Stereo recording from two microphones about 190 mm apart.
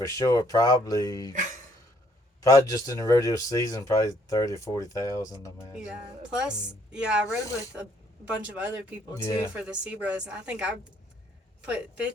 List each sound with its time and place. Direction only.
0.0 s speech: 20° left (ahead or behind)
1.3 s speech: 40° right (ahead or behind)
2.4 s speech: 20° left (ahead or behind)
5.7 s a woman's voice: 5° right (ahead or behind)
7.3 s speech: 15° left (ahead or behind)
8.5 s speech: 10° right (ahead or behind)
9.2 s speech: 15° left (ahead or behind)
9.6 s a woman's voice: 5° right (ahead or behind)